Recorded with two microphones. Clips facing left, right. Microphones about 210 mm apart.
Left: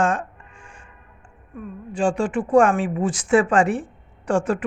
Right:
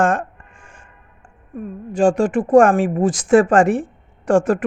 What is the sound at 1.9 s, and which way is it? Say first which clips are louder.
A woman's voice: right 6 dB; 45° right (ahead or behind).